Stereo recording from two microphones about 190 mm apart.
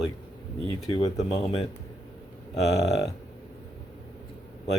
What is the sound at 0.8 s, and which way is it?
Speech, 25° left (ahead or behind).